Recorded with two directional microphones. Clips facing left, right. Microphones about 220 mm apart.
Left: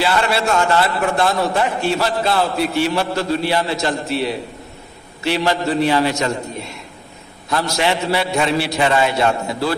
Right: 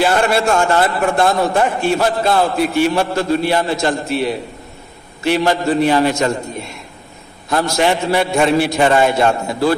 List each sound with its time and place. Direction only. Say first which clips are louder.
0.0 s a man's voice: right 4 dB; 50° right (ahead or behind)
7.4 s a man's voice: right 3 dB; 50° right (ahead or behind)